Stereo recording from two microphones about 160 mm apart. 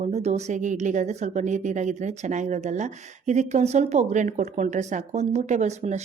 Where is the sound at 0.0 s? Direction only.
45° right (ahead or behind).